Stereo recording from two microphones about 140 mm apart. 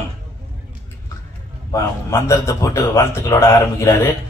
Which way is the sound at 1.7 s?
20° left (ahead or behind).